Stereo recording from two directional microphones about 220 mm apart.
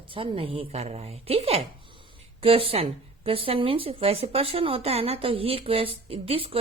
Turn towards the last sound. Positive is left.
turn(degrees=-25)  # may be behind; listen again after turning